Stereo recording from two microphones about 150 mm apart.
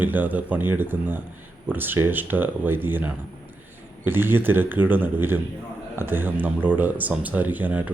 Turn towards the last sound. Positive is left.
turn(degrees=-10)  # may be behind; listen again after turning